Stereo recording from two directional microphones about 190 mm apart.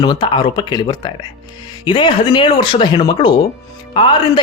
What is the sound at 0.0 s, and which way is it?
Speech, 20° left (ahead or behind).